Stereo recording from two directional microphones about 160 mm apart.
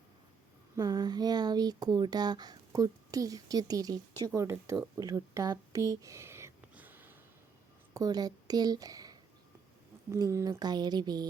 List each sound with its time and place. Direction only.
0.8 s speech: 25° right (ahead or behind)
4.9 s a sound: 20° right (ahead or behind)
7.9 s a woman's voice: 25° right (ahead or behind)